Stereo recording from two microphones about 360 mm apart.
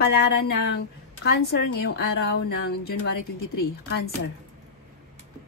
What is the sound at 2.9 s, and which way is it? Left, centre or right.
Speech, left.